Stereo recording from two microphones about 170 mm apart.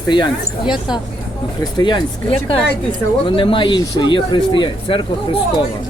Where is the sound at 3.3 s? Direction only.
30° left (ahead or behind).